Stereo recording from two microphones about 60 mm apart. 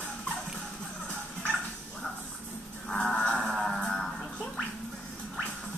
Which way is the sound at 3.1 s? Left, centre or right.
Centre.